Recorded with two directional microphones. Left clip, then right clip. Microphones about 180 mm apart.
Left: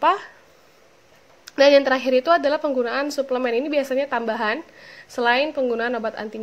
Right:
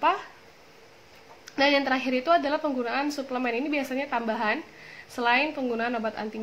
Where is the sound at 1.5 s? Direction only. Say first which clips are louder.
Left 8 dB; 45° left (ahead or behind).